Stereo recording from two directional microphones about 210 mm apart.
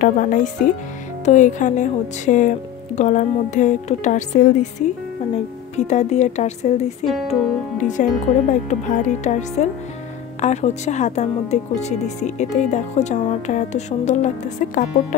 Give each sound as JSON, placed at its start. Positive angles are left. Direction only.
{"t": 0.0, "sound": "speech", "side_deg": 40}
{"t": 5.8, "sound": "speech", "side_deg": 35}